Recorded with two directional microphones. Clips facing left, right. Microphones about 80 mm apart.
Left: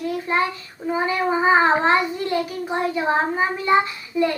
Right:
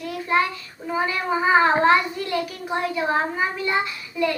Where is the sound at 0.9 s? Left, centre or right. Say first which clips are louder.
Left 2 dB; left.